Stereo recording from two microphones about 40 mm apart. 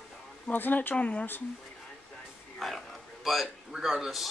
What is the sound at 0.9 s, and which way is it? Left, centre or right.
Speech, left.